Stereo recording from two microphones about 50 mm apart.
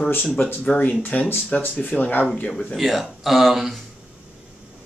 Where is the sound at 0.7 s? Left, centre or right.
Left.